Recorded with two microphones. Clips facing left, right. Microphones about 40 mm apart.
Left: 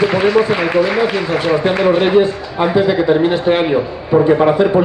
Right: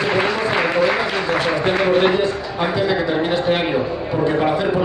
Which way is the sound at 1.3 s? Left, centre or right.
Left.